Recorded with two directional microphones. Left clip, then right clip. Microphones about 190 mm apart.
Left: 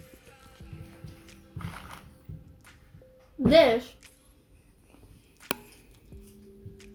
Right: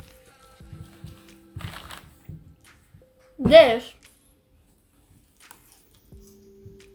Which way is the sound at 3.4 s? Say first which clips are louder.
Right 2 dB; 15° right (ahead or behind).